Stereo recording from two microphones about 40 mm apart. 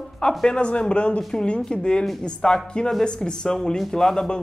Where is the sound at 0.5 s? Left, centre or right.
Left.